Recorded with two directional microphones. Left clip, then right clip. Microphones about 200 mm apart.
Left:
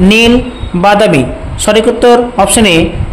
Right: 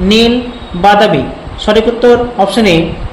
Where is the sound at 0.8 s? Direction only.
35° left (ahead or behind).